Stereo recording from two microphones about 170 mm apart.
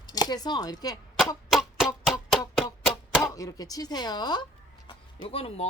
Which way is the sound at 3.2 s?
20° left (ahead or behind).